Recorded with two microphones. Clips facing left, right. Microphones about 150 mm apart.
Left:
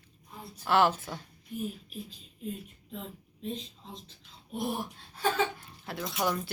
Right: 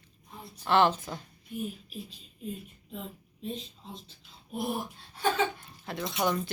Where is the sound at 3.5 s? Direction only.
Centre (ahead or behind).